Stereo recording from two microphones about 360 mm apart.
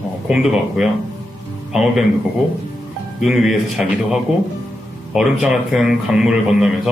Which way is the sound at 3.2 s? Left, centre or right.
Centre.